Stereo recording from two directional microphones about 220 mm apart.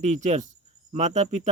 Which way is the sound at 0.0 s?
35° right (ahead or behind).